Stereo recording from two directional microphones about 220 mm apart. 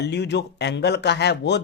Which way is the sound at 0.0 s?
50° left (ahead or behind).